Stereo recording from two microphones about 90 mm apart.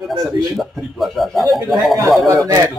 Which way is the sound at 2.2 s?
40° right (ahead or behind).